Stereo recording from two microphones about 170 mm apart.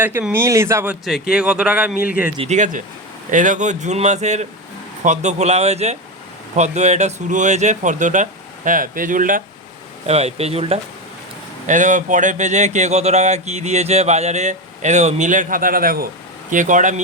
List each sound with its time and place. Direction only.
0.0 s speech: 10° right (ahead or behind)
1.3 s speech: 5° right (ahead or behind)
2.4 s speech: 45° right (ahead or behind)
10.1 s speech: 40° right (ahead or behind)
11.6 s speech: 45° right (ahead or behind)